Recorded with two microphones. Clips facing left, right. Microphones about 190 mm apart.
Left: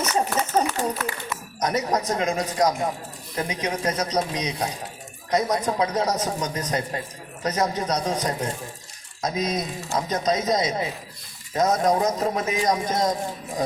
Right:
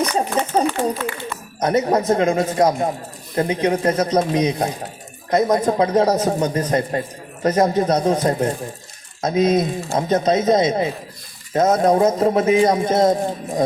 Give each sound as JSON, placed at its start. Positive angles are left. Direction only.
{"t": 0.0, "sound": "a man's voice", "side_deg": -30}
{"t": 9.2, "sound": "a man's voice", "side_deg": -30}